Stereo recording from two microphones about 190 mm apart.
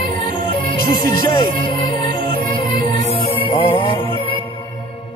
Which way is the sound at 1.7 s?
25° left (ahead or behind).